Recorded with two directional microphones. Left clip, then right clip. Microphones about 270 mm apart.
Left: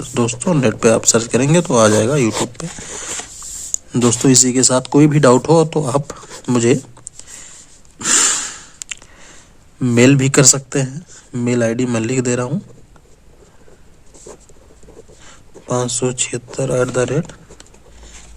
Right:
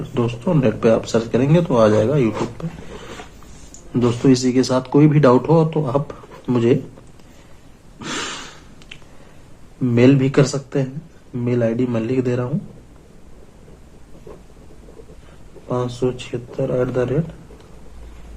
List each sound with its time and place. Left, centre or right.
0.1 s speech: left
3.9 s speech: left
7.9 s a sound: left
9.8 s speech: left
15.6 s speech: left